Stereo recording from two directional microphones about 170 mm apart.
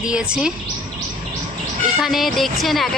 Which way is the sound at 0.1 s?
5° right (ahead or behind).